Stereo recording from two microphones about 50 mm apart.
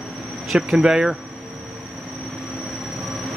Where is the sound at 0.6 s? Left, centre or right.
Centre.